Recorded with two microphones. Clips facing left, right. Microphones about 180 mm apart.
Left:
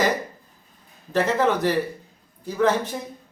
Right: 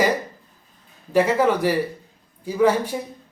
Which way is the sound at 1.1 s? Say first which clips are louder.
Right 3 dB; 10° right (ahead or behind).